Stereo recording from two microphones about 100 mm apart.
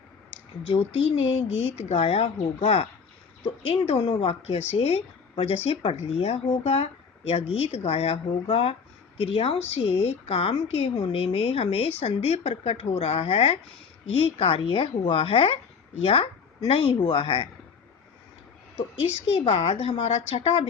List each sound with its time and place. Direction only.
0.3 s speech: 85° left
3.8 s speech: 90° left; by 8.7 s 70° left (ahead or behind)
9.1 s a woman's voice: 85° left
14.2 s a woman's voice: 70° left (ahead or behind)
19.2 s speech: 75° left (ahead or behind)